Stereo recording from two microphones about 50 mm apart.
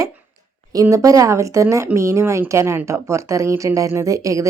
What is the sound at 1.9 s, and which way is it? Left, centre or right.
Speech, right.